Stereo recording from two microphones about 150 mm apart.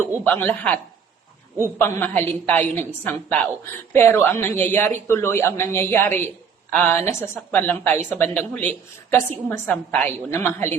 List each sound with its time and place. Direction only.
0.3 s speech: 10° left (ahead or behind)
1.8 s speech: 15° left (ahead or behind)